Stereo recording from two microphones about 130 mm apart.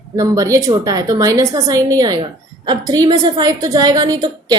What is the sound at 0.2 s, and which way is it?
A woman's voice, 25° right (ahead or behind).